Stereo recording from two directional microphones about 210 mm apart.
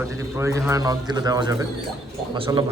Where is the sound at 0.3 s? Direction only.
15° right (ahead or behind).